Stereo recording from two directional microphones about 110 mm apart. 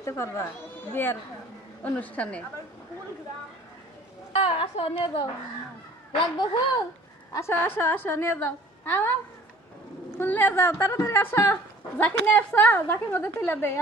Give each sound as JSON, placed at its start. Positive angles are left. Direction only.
{"t": 0.0, "sound": "a woman's voice", "side_deg": 25}
{"t": 1.8, "sound": "a woman's voice", "side_deg": 15}
{"t": 4.3, "sound": "a woman's voice", "side_deg": 65}
{"t": 6.3, "sound": "a woman's voice", "side_deg": 40}
{"t": 7.3, "sound": "a woman's voice", "side_deg": 20}
{"t": 10.1, "sound": "a woman's voice", "side_deg": 20}